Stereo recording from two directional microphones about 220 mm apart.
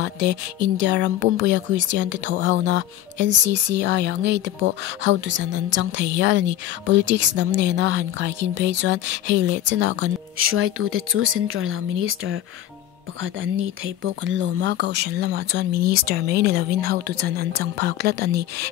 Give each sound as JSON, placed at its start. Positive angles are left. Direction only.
{"t": 0.0, "sound": "speech", "side_deg": -55}